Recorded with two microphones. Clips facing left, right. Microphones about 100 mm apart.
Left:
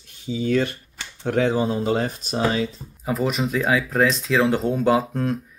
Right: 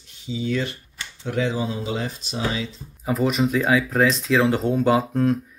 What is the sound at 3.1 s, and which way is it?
Speech, centre (ahead or behind).